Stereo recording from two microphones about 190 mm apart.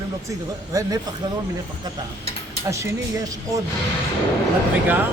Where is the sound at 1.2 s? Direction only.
20° right (ahead or behind).